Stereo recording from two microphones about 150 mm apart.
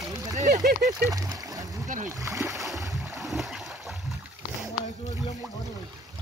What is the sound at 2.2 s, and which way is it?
Speech, 20° right (ahead or behind).